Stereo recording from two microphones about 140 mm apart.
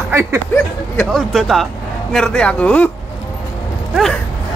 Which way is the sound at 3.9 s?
Centre (ahead or behind).